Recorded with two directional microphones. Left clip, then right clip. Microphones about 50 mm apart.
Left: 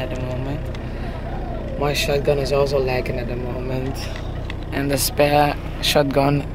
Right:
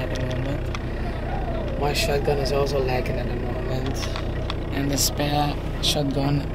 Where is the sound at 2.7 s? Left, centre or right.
Left.